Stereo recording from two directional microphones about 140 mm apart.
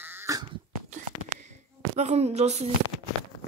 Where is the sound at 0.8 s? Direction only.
55° right (ahead or behind).